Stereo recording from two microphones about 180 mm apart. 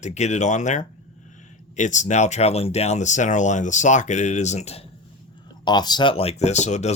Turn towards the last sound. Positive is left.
turn(degrees=40)  # may be behind; listen again after turning